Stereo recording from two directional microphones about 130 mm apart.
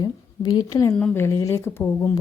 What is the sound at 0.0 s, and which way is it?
A woman's voice, 30° left (ahead or behind).